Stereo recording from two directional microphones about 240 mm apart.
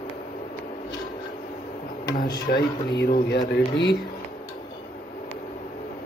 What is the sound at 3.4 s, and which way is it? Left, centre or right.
Speech, centre.